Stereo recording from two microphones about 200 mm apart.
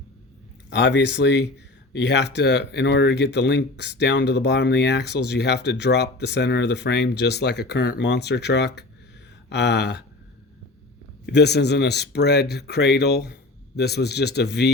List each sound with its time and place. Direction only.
0.7 s speech: 60° left (ahead or behind)
11.3 s speech: 55° left (ahead or behind)